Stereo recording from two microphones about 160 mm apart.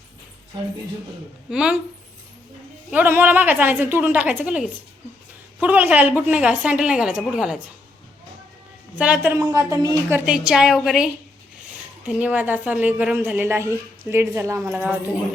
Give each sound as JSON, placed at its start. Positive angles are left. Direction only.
{"t": 1.5, "sound": "a woman's voice", "side_deg": -5}
{"t": 2.9, "sound": "a woman's voice", "side_deg": -10}
{"t": 9.0, "sound": "a woman's voice", "side_deg": -5}
{"t": 9.3, "sound": "speech", "side_deg": -20}
{"t": 10.2, "sound": "a woman's voice", "side_deg": -5}